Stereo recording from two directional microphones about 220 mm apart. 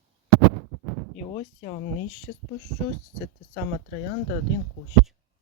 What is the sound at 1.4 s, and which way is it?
Speech, 25° left (ahead or behind).